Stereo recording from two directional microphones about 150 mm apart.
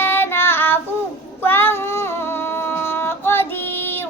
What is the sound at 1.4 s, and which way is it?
Cat, 15° left (ahead or behind).